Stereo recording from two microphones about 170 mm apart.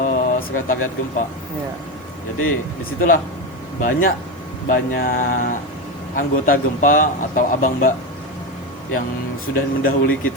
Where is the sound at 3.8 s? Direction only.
55° left (ahead or behind).